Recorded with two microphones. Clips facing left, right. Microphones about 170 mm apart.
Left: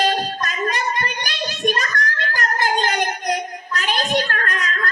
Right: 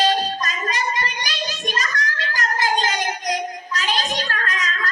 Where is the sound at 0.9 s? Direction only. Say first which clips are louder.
Left 1 dB; 55° left (ahead or behind).